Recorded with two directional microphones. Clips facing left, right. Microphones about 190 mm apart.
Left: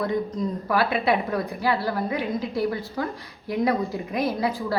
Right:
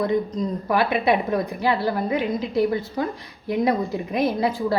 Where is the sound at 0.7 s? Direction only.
20° right (ahead or behind).